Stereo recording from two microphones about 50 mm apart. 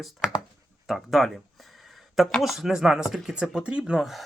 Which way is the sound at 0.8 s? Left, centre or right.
Centre.